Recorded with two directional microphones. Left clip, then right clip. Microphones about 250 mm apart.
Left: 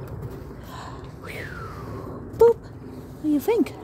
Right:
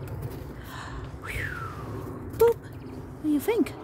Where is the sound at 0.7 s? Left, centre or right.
Centre.